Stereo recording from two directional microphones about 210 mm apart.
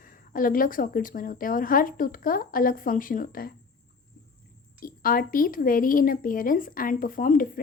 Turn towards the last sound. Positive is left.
turn(degrees=40)  # may be behind; listen again after turning